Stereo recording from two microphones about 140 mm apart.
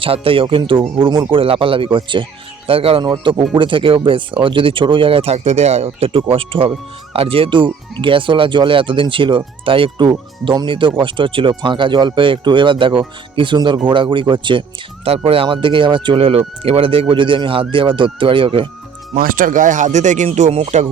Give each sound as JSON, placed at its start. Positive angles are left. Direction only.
{"t": 0.0, "sound": "speech", "side_deg": -40}
{"t": 3.0, "sound": "speech", "side_deg": -30}
{"t": 19.1, "sound": "speech", "side_deg": -85}